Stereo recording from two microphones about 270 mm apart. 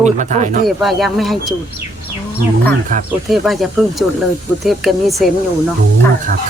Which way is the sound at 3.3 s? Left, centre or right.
Centre.